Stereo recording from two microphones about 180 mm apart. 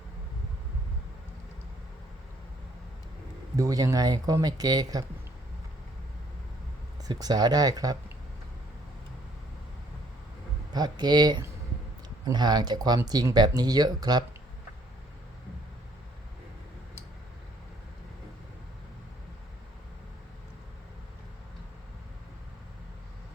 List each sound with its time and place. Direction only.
3.6 s speech: 20° right (ahead or behind)
7.0 s speech: 20° right (ahead or behind)
10.7 s speech: 25° right (ahead or behind)